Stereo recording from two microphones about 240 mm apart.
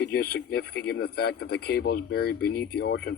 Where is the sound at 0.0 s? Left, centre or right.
Left.